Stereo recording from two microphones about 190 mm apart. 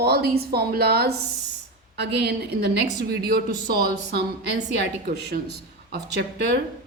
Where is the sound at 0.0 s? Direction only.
55° right (ahead or behind).